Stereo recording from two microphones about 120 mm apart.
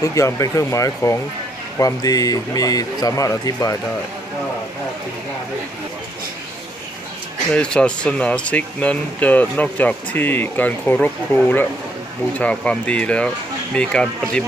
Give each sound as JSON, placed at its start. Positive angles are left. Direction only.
{"t": 0.0, "sound": "a man's voice", "side_deg": 25}
{"t": 7.5, "sound": "speech", "side_deg": 10}